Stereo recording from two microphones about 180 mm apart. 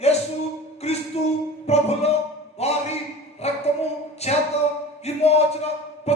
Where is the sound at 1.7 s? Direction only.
35° left (ahead or behind).